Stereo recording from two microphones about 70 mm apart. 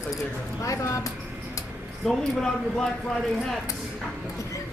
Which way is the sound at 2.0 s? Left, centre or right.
Centre.